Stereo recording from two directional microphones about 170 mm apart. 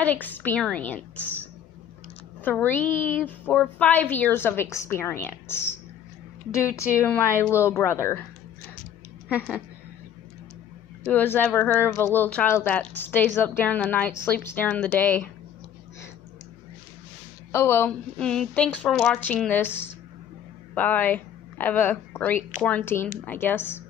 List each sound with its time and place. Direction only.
0.0 s a woman's voice: 10° left (ahead or behind)
2.4 s a woman's voice: 10° left (ahead or behind)
11.1 s a woman's voice: 10° left (ahead or behind)
17.5 s a woman's voice: 15° left (ahead or behind)